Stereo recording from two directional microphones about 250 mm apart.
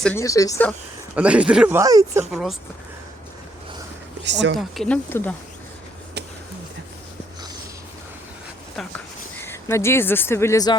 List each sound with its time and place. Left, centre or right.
0.0 s speech: centre
1.1 s speech: centre
2.3 s speech: centre
4.3 s speech: right
4.5 s speech: centre
9.4 s speech: centre